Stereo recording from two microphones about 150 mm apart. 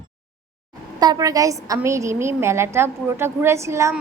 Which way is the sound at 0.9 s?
25° right (ahead or behind).